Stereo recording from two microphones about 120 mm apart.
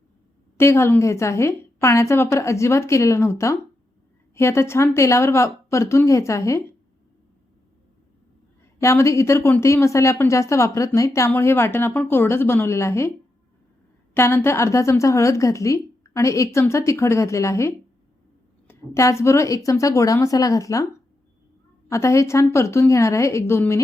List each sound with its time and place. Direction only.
0.5 s a woman's voice: 20° left (ahead or behind)
8.8 s a woman's voice: 25° left (ahead or behind)
21.8 s a woman's voice: 25° left (ahead or behind)